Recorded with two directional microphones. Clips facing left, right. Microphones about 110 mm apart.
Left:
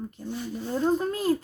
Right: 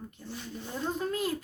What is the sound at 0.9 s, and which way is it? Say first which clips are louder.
Speech: left 6 dB; 35° left (ahead or behind).